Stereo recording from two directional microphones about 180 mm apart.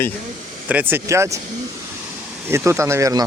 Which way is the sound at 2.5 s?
15° right (ahead or behind).